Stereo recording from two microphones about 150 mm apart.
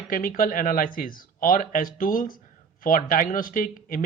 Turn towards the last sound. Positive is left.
turn(degrees=70)  # may be behind; listen again after turning